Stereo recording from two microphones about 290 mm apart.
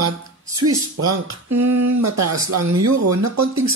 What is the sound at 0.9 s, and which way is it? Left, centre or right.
Speech, right.